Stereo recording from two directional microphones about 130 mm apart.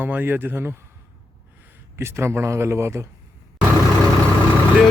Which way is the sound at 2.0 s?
20° right (ahead or behind).